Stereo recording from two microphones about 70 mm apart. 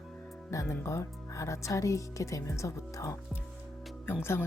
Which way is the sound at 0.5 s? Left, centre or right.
Left.